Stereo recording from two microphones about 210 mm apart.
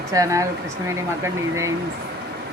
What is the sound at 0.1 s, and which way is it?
Speech, 15° right (ahead or behind).